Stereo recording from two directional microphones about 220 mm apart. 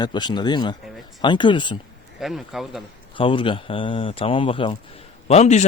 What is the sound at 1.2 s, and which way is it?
Speech, 20° left (ahead or behind).